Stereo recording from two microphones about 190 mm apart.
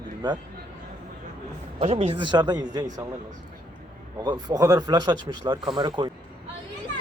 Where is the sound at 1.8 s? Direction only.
30° right (ahead or behind).